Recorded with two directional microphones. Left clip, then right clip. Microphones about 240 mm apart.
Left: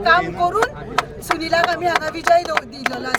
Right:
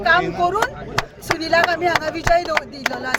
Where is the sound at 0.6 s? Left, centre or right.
Right.